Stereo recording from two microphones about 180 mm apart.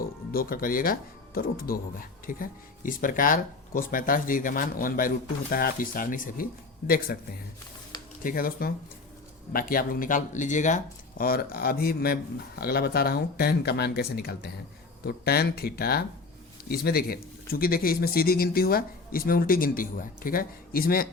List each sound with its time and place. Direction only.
0.0 s speech: 55° left (ahead or behind)
8.2 s speech: 50° left (ahead or behind)